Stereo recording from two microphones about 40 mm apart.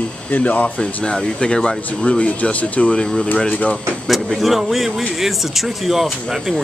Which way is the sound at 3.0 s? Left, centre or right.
Centre.